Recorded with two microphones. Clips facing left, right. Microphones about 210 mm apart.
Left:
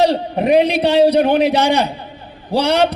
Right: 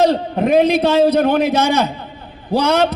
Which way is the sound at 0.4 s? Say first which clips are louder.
Right 1 dB; 45° right (ahead or behind).